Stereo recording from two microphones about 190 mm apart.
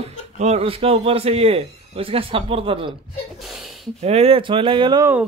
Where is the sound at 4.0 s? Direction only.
35° right (ahead or behind).